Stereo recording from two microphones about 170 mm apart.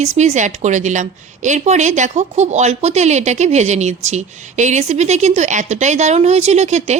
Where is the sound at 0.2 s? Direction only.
45° right (ahead or behind).